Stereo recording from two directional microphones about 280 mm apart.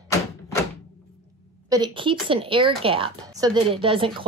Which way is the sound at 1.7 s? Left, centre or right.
Centre.